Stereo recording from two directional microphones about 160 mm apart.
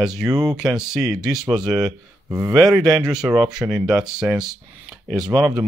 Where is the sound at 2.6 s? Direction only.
Centre (ahead or behind).